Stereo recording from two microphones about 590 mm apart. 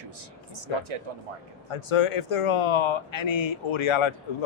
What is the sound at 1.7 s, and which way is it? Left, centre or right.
Speech, left.